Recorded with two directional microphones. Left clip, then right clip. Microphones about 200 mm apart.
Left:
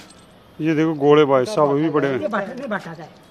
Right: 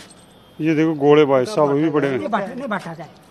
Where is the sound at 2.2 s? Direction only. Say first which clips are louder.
Right 1 dB; 60° right (ahead or behind).